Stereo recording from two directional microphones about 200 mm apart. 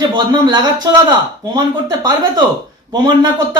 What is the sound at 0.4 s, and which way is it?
Speech, 20° right (ahead or behind).